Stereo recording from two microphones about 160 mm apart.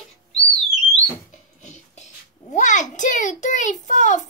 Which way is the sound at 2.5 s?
50° left (ahead or behind).